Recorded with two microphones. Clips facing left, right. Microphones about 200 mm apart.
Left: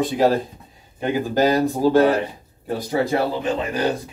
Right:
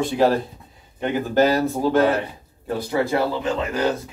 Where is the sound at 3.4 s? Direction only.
15° left (ahead or behind).